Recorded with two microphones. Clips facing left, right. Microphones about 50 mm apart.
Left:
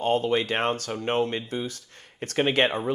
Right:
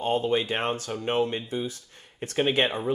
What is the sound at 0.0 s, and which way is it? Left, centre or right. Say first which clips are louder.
Speech: left 1 dB; left.